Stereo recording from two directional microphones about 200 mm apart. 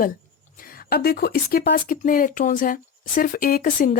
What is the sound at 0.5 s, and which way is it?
Speech, 50° left (ahead or behind).